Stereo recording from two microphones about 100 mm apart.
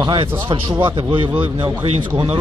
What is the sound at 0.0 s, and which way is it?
A man's voice, 55° right (ahead or behind).